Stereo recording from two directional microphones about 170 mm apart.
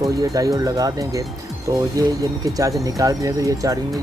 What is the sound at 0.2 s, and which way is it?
Speech, 20° right (ahead or behind).